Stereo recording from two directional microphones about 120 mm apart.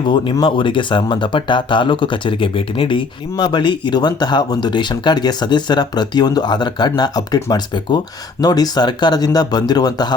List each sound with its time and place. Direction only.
0.0 s speech: 40° left (ahead or behind)